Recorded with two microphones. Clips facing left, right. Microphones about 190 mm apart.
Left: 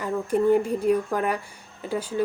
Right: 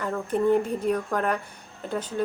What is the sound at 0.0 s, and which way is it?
Speech, 10° left (ahead or behind).